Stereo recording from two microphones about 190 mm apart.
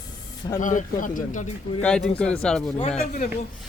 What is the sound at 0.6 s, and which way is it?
Speech, 45° left (ahead or behind).